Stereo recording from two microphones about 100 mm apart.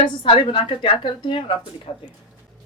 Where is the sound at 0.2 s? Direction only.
60° left (ahead or behind).